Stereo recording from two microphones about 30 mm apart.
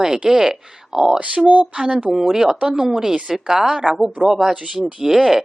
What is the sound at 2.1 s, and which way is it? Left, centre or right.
Speech, centre.